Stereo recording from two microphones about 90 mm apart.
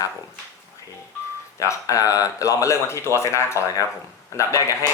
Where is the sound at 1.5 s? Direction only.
35° left (ahead or behind).